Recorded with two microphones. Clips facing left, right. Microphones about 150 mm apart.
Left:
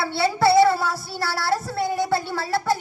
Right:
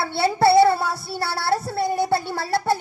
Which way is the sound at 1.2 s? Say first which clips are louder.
Right 1 dB; 25° right (ahead or behind).